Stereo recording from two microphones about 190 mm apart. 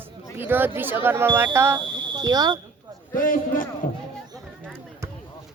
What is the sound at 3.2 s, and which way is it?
Speech, 45° left (ahead or behind).